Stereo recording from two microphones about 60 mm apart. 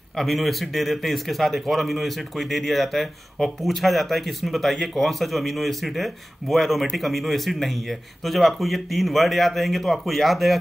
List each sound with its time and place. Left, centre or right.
0.2 s speech: centre